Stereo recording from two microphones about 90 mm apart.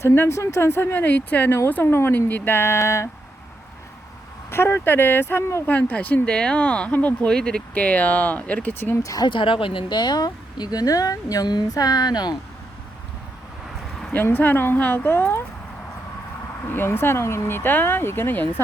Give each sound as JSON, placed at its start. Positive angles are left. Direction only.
{"t": 0.0, "sound": "speech", "side_deg": 30}
{"t": 4.5, "sound": "speech", "side_deg": 25}
{"t": 5.6, "sound": "speech", "side_deg": 15}
{"t": 9.0, "sound": "speech", "side_deg": 45}
{"t": 9.3, "sound": "speech", "side_deg": 70}
{"t": 14.1, "sound": "speech", "side_deg": 20}
{"t": 16.6, "sound": "speech", "side_deg": 25}